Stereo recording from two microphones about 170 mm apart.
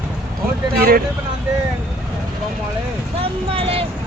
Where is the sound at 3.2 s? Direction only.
35° right (ahead or behind).